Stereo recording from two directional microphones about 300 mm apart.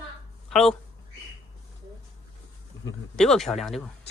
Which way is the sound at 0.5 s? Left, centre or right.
Centre.